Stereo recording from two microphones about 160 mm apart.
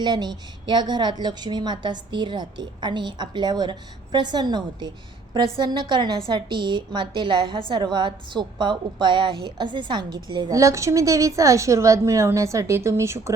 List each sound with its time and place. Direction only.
0.0 s a woman's voice: 30° right (ahead or behind)